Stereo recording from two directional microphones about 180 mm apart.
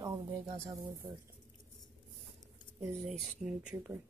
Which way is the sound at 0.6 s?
15° right (ahead or behind).